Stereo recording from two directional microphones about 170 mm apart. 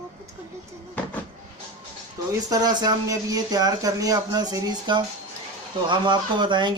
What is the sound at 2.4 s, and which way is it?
Speech, 20° right (ahead or behind).